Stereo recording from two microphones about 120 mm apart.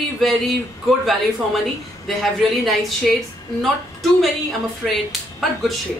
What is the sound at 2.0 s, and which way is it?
A woman's voice, centre (ahead or behind).